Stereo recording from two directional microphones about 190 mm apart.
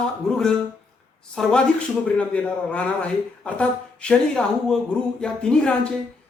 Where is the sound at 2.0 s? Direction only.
5° left (ahead or behind).